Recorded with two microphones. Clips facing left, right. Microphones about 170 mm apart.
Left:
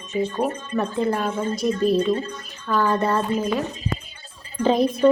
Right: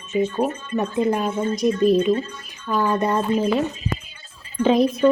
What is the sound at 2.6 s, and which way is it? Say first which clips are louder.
Speech: even; 15° right (ahead or behind).